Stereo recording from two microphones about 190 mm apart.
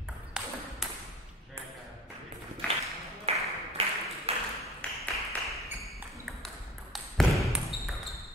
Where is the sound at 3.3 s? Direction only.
30° right (ahead or behind).